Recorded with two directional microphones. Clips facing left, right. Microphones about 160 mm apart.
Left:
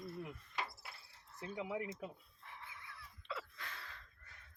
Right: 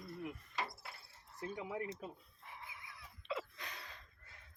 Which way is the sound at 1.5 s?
15° left (ahead or behind).